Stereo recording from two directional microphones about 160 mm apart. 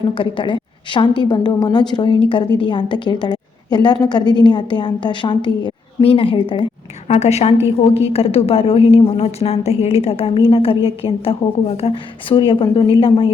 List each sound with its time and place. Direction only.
0.1 s a woman's voice: 30° left (ahead or behind)
7.1 s a woman's voice: 40° left (ahead or behind)